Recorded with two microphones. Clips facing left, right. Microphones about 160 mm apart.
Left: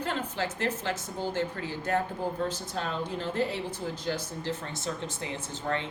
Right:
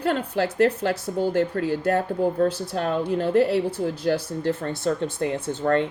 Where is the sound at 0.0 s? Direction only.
60° right (ahead or behind).